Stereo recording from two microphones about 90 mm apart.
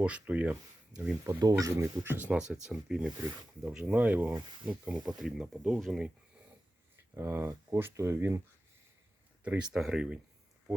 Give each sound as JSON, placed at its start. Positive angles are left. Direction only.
{"t": 0.0, "sound": "speech", "side_deg": -15}
{"t": 1.2, "sound": "speech", "side_deg": -40}
{"t": 2.1, "sound": "speech", "side_deg": -15}
{"t": 4.4, "sound": "speech", "side_deg": -60}
{"t": 4.7, "sound": "speech", "side_deg": -15}
{"t": 5.0, "sound": "speech", "side_deg": -5}
{"t": 7.1, "sound": "speech", "side_deg": -30}
{"t": 9.4, "sound": "speech", "side_deg": -15}